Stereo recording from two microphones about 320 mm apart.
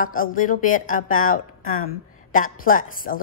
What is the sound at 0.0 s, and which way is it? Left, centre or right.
A woman's voice, left.